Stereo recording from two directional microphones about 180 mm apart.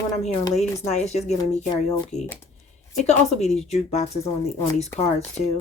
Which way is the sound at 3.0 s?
40° left (ahead or behind).